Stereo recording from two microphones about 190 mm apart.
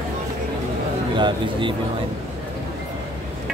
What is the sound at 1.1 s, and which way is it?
Speech, 25° right (ahead or behind).